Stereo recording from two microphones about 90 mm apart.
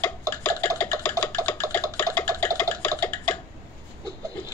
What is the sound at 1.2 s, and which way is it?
Toothbrush, 20° left (ahead or behind).